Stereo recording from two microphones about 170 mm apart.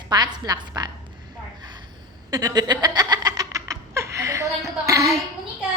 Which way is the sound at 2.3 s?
20° right (ahead or behind).